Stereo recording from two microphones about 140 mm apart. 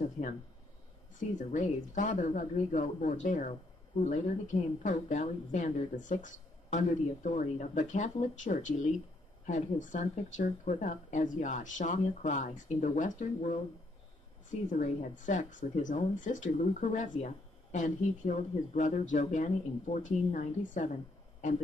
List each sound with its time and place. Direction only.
1.5 s speech: 60° left (ahead or behind)
14.7 s speech: 65° left (ahead or behind)